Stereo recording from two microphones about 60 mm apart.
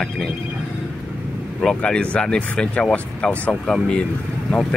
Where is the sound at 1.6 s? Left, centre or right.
Centre.